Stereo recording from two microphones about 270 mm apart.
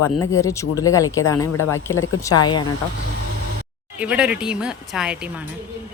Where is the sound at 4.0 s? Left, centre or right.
Centre.